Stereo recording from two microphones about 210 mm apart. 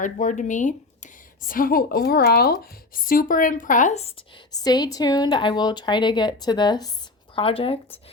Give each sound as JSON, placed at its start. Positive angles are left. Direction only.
{"t": 0.0, "sound": "a woman's voice", "side_deg": 35}
{"t": 4.5, "sound": "speech", "side_deg": 20}